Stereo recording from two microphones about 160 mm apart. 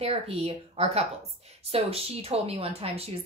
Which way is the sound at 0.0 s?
40° right (ahead or behind).